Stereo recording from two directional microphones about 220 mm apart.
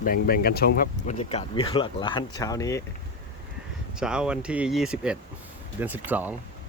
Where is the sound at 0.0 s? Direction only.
40° left (ahead or behind).